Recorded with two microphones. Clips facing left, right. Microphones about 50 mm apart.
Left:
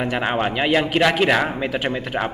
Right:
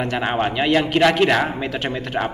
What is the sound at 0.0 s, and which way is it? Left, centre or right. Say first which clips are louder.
A man's voice: even; centre.